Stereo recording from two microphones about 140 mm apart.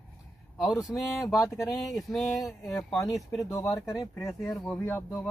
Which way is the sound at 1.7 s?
Centre (ahead or behind).